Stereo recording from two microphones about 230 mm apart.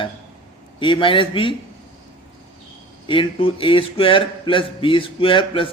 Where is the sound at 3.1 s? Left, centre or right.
Left.